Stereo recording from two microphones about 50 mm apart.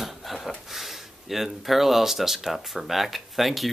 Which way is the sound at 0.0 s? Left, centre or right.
Centre.